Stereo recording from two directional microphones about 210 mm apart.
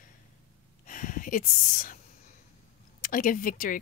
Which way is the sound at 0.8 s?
40° left (ahead or behind).